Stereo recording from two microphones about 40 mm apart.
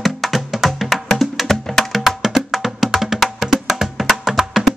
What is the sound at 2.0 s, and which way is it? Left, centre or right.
Music, centre.